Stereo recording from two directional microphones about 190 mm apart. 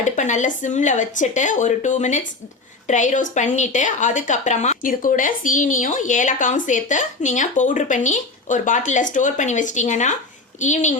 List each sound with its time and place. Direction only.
0.0 s a woman's voice: 40° left (ahead or behind)